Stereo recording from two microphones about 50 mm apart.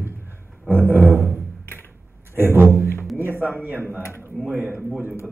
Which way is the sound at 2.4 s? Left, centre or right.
Right.